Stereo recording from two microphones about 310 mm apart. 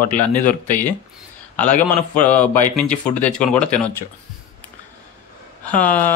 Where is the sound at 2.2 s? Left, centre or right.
Centre.